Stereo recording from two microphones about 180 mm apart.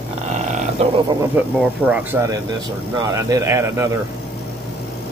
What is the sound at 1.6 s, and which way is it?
Speech, 10° right (ahead or behind).